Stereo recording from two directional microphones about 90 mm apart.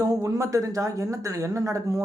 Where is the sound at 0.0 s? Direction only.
40° right (ahead or behind).